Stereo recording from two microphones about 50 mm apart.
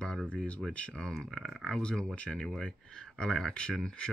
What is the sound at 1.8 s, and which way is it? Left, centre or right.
Speech, centre.